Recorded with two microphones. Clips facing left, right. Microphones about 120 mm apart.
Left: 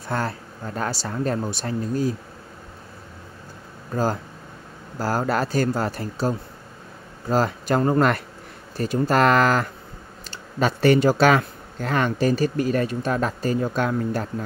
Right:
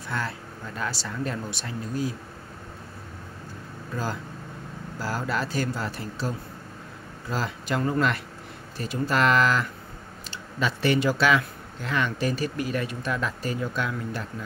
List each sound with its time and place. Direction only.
0.1 s speech: 45° left (ahead or behind)
3.9 s speech: 45° left (ahead or behind)